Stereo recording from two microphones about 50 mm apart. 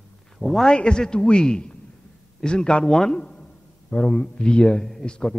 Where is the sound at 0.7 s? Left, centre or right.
Centre.